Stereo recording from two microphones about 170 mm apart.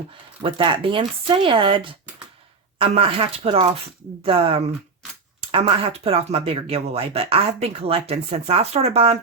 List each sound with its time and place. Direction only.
0.4 s speech: 30° right (ahead or behind)